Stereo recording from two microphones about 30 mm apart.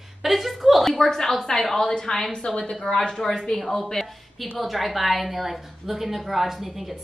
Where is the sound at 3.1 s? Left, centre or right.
Centre.